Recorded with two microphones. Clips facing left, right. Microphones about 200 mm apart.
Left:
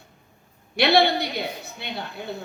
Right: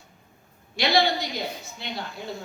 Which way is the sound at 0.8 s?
60° left (ahead or behind).